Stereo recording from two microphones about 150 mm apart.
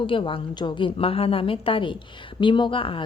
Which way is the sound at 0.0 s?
35° left (ahead or behind).